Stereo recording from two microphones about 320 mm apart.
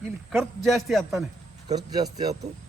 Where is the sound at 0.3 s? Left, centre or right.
Centre.